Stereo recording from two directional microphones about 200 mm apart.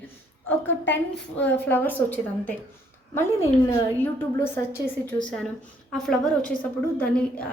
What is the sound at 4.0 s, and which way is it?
A woman's voice, 10° left (ahead or behind).